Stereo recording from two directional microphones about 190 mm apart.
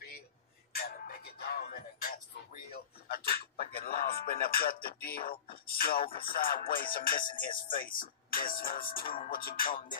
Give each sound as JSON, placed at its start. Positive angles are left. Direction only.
{"t": 0.7, "sound": "music", "side_deg": 50}
{"t": 6.3, "sound": "speech", "side_deg": 50}